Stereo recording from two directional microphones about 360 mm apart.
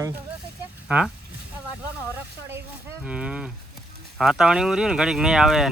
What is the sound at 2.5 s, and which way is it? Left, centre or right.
Speech, centre.